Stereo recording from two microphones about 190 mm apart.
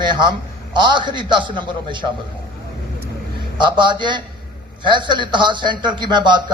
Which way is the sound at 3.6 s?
25° right (ahead or behind).